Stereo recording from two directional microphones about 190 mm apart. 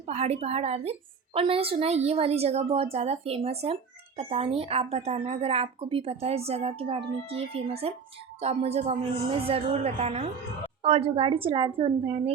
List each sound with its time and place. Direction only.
0.0 s a woman's voice: 35° right (ahead or behind)